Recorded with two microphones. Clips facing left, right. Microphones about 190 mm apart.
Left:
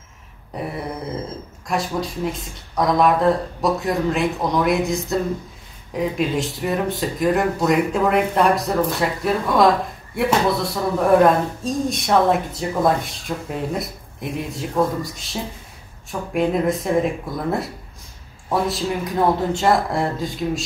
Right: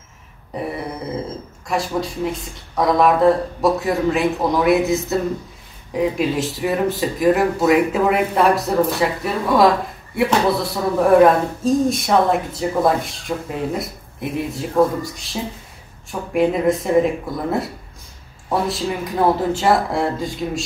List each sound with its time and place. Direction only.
1.7 s speech: centre (ahead or behind)